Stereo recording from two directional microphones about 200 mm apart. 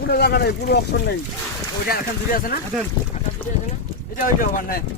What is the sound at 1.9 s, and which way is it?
Speech, 45° left (ahead or behind).